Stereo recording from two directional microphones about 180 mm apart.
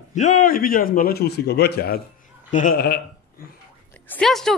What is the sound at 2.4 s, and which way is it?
Speech, 45° left (ahead or behind).